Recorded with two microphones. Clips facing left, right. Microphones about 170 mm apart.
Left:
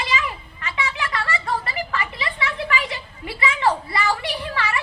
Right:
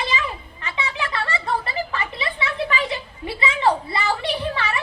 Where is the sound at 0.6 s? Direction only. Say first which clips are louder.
Left 1 dB; 20° right (ahead or behind).